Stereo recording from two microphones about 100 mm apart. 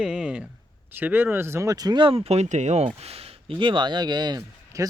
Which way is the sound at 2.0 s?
80° right.